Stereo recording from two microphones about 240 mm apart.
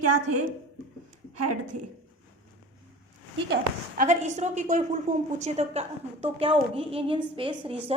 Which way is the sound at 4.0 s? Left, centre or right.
Right.